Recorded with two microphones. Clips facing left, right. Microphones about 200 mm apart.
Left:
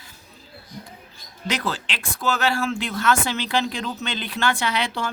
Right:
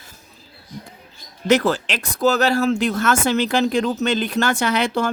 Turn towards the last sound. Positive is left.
turn(degrees=-45)  # may be behind; listen again after turning